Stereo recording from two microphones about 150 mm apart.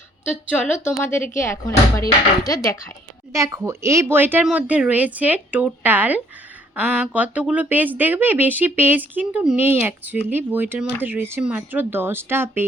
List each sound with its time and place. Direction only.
0.5 s speech: 15° left (ahead or behind)
3.3 s speech: 20° right (ahead or behind)